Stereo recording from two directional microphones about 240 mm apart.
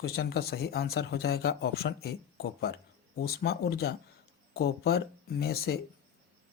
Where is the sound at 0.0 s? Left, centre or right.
Left.